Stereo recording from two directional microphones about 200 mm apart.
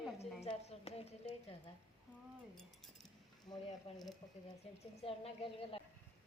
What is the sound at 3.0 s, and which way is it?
Cutlery, 20° left (ahead or behind).